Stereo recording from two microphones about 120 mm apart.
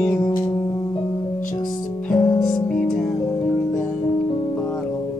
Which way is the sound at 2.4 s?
5° left (ahead or behind).